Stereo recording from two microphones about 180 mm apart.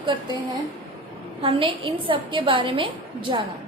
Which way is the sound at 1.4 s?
30° right (ahead or behind).